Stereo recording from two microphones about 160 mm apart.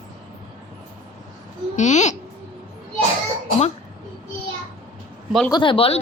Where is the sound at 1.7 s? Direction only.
50° left (ahead or behind).